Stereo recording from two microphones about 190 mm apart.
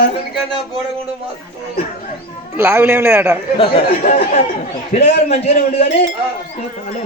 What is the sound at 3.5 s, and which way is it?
Speech, 30° left (ahead or behind).